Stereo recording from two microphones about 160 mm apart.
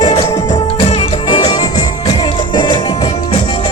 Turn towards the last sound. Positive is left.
turn(degrees=30)  # may be behind; listen again after turning